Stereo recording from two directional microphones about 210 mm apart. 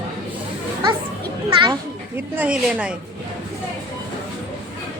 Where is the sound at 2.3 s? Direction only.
5° right (ahead or behind).